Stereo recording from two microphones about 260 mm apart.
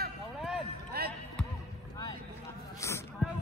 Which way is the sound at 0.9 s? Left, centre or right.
Right.